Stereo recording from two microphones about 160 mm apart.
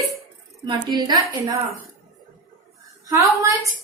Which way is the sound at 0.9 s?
25° right (ahead or behind).